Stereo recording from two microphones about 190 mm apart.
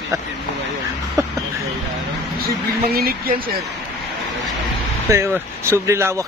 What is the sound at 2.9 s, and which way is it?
Speech, 55° right (ahead or behind).